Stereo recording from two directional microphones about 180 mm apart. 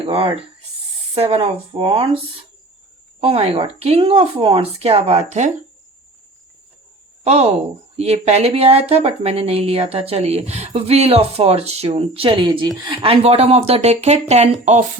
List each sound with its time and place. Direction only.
0.0 s a woman's voice: 30° right (ahead or behind)
3.2 s a woman's voice: 30° right (ahead or behind)
7.3 s a woman's voice: 35° right (ahead or behind)